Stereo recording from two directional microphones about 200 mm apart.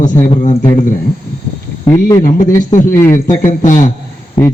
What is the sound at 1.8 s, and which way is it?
Speech, 15° left (ahead or behind).